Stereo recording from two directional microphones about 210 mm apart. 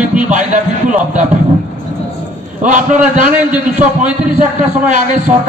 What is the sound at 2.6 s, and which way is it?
Speech, 35° right (ahead or behind).